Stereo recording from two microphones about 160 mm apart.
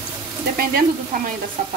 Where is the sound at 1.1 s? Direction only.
65° right (ahead or behind).